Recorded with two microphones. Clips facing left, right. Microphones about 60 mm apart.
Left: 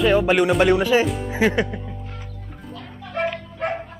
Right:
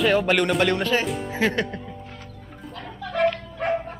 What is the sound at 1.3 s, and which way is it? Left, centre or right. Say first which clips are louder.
Speech: left 3 dB; centre.